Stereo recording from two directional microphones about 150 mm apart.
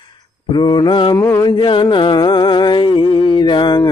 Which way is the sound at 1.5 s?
35° left (ahead or behind).